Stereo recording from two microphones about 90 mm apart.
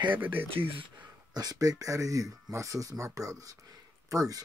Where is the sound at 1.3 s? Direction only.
45° right (ahead or behind).